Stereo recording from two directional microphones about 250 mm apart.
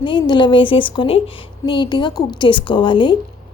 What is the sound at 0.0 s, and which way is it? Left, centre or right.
A woman's voice, centre.